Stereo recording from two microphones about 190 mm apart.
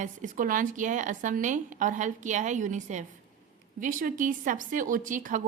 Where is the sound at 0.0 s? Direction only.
40° right (ahead or behind).